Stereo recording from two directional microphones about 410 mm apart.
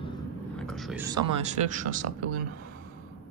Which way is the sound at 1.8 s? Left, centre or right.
Centre.